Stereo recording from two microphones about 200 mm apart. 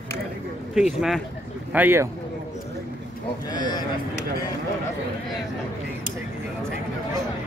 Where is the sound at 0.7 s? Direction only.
Centre (ahead or behind).